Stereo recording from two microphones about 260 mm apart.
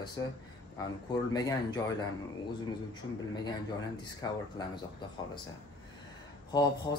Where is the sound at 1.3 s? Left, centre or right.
Centre.